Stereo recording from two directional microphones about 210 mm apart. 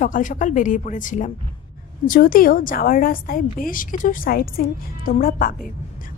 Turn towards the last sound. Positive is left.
turn(degrees=40)  # may be behind; listen again after turning